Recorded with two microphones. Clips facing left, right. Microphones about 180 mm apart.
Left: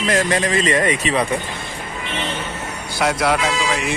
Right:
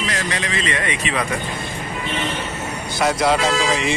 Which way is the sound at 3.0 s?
5° left (ahead or behind).